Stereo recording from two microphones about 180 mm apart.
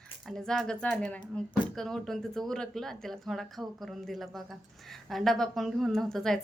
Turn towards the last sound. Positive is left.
turn(degrees=0)  # may be behind; listen again after turning